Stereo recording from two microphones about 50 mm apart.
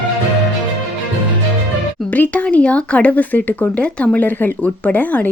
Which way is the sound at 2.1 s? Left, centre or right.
Left.